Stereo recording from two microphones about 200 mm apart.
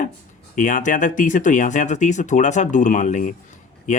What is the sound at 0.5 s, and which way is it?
Speech, 40° left (ahead or behind).